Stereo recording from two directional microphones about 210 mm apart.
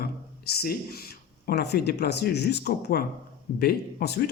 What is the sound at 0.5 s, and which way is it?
Speech, 45° left (ahead or behind).